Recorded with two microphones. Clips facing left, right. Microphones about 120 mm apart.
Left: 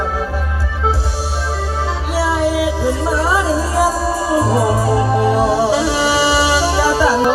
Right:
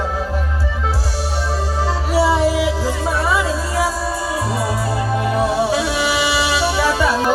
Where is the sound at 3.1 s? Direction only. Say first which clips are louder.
Left 1 dB; 30° left (ahead or behind).